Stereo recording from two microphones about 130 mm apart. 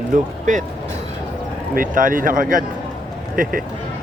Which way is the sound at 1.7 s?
90° right.